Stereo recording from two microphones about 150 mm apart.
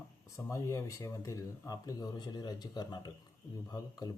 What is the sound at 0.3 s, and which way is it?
Speech, 20° left (ahead or behind).